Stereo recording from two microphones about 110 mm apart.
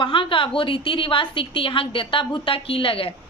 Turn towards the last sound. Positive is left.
turn(degrees=55)  # may be behind; listen again after turning